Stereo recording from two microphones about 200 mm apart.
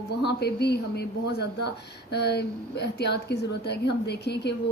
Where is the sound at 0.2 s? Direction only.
55° left (ahead or behind).